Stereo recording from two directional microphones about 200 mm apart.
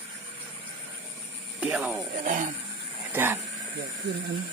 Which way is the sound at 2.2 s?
40° right (ahead or behind).